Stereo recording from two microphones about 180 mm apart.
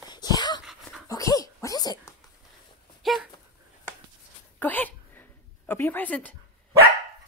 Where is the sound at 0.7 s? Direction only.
Centre (ahead or behind).